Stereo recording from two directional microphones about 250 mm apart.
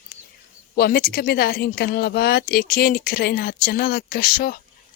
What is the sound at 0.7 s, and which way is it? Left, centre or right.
Speech, left.